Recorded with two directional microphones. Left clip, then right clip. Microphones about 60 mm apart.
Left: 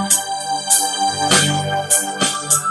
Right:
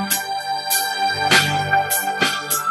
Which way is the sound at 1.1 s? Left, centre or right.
Left.